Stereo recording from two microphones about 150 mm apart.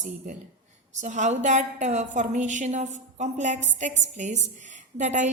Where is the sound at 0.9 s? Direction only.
55° right (ahead or behind).